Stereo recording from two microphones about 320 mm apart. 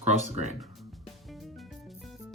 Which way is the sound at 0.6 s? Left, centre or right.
Centre.